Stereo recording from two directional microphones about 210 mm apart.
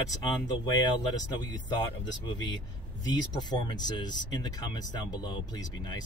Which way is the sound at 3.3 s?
20° left (ahead or behind).